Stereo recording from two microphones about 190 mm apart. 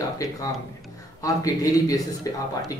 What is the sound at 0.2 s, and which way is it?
A man's voice, 20° left (ahead or behind).